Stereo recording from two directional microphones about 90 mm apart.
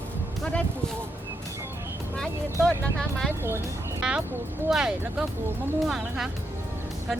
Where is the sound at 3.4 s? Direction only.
25° right (ahead or behind).